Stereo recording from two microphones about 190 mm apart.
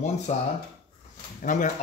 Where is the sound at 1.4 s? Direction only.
40° left (ahead or behind).